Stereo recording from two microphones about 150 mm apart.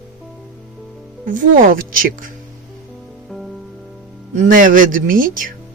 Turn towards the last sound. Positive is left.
turn(degrees=-65)  # may be behind; listen again after turning